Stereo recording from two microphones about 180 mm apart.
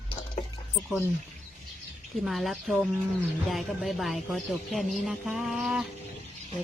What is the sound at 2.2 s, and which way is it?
Speech, centre (ahead or behind).